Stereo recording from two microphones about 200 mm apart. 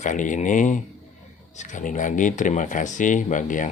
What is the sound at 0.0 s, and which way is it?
Speech, 40° left (ahead or behind).